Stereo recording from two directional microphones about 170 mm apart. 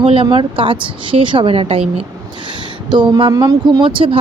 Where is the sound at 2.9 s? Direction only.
25° right (ahead or behind).